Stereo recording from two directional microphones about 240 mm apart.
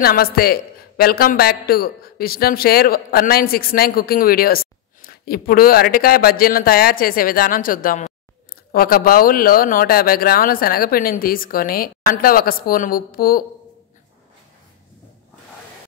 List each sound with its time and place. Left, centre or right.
0.0 s a woman's voice: left